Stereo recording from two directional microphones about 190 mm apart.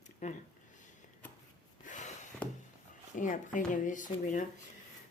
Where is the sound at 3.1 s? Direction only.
45° left (ahead or behind).